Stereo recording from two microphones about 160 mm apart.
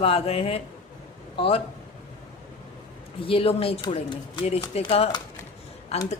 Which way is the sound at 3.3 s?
35° left (ahead or behind).